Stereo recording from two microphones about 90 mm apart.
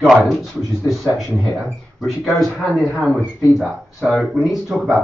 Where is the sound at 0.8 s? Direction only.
Centre (ahead or behind).